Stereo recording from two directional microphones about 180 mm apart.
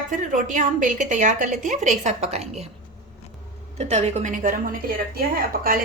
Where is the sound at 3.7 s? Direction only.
35° right (ahead or behind); by 5.7 s 55° right (ahead or behind).